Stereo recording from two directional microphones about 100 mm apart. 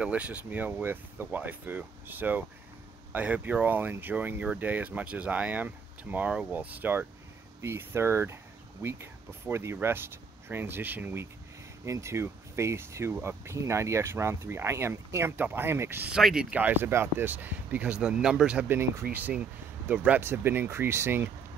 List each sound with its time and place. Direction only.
0.0 s speech: 15° right (ahead or behind)
16.1 s speech: 5° right (ahead or behind); by 21.3 s 25° right (ahead or behind)